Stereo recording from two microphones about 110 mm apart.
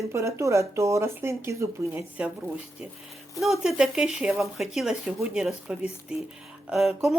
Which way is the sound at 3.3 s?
Centre (ahead or behind).